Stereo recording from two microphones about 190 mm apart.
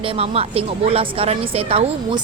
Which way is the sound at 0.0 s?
30° right (ahead or behind).